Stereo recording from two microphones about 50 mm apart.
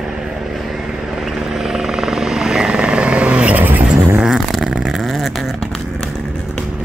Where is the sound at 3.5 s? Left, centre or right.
Right.